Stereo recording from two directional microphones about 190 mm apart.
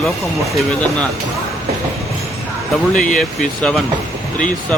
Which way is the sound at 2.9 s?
45° left (ahead or behind).